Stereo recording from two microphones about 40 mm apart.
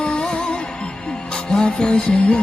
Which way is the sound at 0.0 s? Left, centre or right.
Left.